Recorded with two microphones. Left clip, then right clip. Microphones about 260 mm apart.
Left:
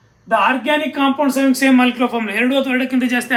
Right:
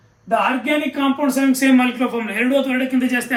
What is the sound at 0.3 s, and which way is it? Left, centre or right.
Speech, centre.